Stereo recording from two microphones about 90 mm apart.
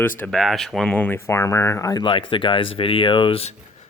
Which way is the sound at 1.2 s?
30° left (ahead or behind).